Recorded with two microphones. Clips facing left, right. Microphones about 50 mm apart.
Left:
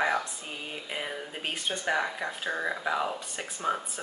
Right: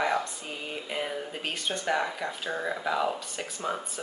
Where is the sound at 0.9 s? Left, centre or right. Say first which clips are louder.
Right 3 dB; centre.